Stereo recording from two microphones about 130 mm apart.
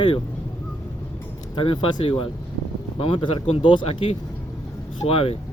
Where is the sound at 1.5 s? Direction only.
40° left (ahead or behind).